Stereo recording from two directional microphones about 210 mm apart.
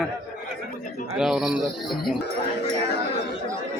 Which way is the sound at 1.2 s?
Centre (ahead or behind).